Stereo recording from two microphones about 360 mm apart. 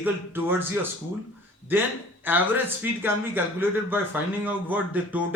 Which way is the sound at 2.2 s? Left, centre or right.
Centre.